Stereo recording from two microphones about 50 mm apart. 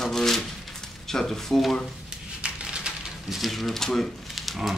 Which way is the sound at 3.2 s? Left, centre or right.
Centre.